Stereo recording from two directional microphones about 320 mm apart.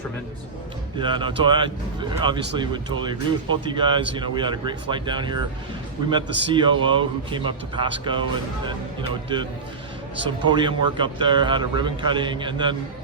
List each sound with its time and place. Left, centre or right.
0.9 s speech: centre